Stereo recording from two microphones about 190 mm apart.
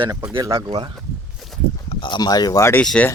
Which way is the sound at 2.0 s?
25° left (ahead or behind).